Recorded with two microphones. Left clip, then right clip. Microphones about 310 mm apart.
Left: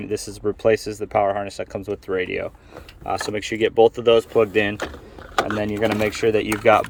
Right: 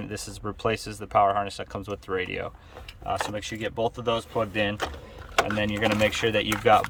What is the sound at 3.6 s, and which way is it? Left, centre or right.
Speech, right.